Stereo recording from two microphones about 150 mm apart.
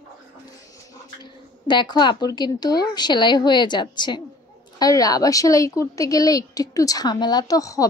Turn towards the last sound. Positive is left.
turn(degrees=20)  # may be behind; listen again after turning